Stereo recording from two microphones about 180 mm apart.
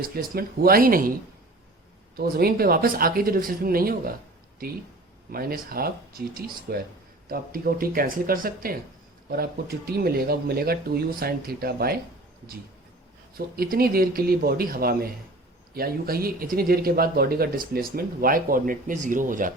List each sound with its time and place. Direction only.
0.1 s speech: 55° right (ahead or behind)
2.1 s speech: 55° right (ahead or behind)
5.3 s speech: 55° right (ahead or behind)
13.3 s speech: 55° right (ahead or behind)